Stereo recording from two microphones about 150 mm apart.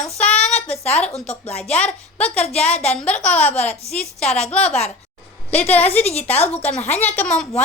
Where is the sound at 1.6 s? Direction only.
5° left (ahead or behind).